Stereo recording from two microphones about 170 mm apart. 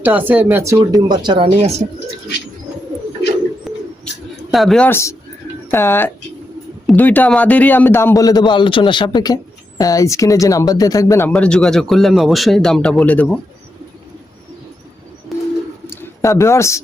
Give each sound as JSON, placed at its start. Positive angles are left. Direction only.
{"t": 0.0, "sound": "speech", "side_deg": -10}
{"t": 3.7, "sound": "bird", "side_deg": 0}
{"t": 4.5, "sound": "speech", "side_deg": 0}
{"t": 4.9, "sound": "a man's voice", "side_deg": 15}
{"t": 15.3, "sound": "bird", "side_deg": 0}
{"t": 16.0, "sound": "speech", "side_deg": 15}